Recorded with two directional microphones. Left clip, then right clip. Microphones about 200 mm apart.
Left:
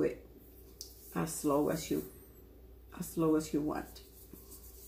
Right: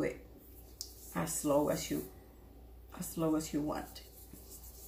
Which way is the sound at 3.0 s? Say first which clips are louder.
Left 3 dB; 15° right (ahead or behind).